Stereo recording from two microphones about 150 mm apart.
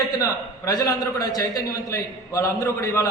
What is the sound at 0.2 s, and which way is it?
A man's voice, 25° left (ahead or behind).